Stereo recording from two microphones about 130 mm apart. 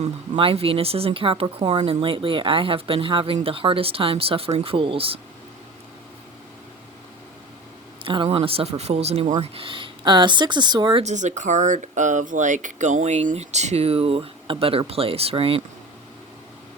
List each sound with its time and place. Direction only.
0.3 s speech: 45° right (ahead or behind)
8.0 s speech: 40° right (ahead or behind)
9.4 s speech: 45° right (ahead or behind)
11.0 s speech: 65° right (ahead or behind); by 15.6 s 45° right (ahead or behind)